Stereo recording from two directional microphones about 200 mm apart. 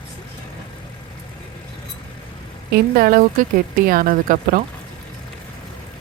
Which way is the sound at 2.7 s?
45° right (ahead or behind).